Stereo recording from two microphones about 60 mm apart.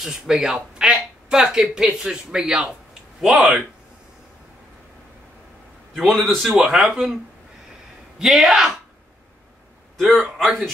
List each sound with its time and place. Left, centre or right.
0.0 s speech: centre
3.3 s speech: right
5.9 s a man's voice: centre
8.2 s speech: centre
9.9 s a man's voice: centre